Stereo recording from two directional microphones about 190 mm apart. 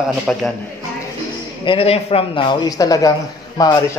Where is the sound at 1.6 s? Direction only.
30° left (ahead or behind).